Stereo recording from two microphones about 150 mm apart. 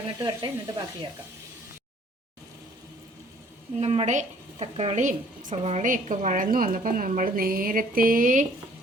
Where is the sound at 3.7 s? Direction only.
45° right (ahead or behind).